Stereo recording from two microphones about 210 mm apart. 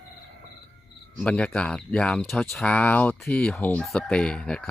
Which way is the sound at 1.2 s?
5° left (ahead or behind).